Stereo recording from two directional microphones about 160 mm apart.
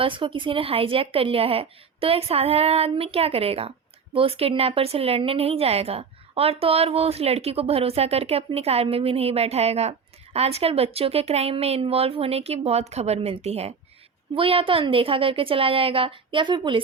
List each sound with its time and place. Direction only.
0.0 s a woman's voice: 35° right (ahead or behind)